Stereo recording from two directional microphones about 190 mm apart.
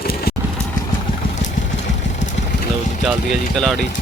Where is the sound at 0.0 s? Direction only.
55° left (ahead or behind).